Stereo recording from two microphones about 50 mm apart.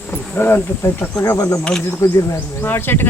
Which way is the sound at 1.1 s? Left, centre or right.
Left.